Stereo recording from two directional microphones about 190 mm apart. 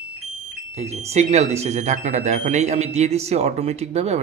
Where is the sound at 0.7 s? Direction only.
35° right (ahead or behind).